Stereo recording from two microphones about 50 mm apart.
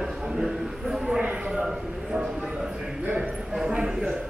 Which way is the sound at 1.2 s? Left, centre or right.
Right.